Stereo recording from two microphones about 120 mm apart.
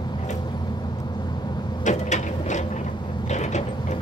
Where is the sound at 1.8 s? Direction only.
90° left.